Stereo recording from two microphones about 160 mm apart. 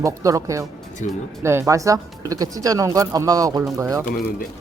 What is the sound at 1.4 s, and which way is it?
Speech, 15° right (ahead or behind).